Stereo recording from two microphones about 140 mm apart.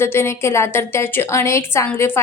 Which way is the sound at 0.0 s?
15° left (ahead or behind).